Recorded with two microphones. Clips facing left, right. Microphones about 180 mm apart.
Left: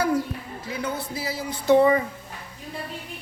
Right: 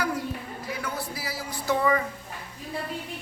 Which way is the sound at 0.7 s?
20° left (ahead or behind).